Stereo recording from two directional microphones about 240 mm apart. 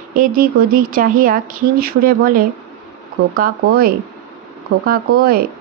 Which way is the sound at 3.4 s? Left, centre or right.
Right.